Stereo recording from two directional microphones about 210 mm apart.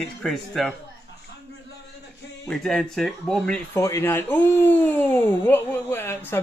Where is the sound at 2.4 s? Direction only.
Centre (ahead or behind).